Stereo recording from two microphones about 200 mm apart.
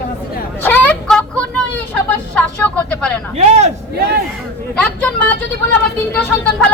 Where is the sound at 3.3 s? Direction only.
35° right (ahead or behind).